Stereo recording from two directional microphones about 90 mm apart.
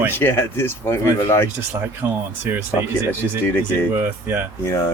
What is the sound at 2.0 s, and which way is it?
Speech, 25° right (ahead or behind).